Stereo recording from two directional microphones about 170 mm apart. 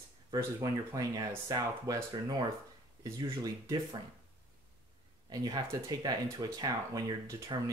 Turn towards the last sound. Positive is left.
turn(degrees=-20)  # may be behind; listen again after turning